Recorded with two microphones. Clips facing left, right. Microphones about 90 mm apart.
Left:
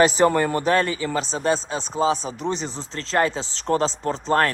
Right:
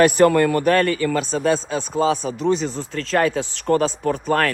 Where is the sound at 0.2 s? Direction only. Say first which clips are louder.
Right 4 dB; 20° left (ahead or behind).